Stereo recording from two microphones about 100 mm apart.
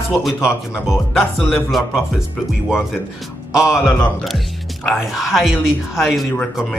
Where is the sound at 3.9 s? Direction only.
15° left (ahead or behind).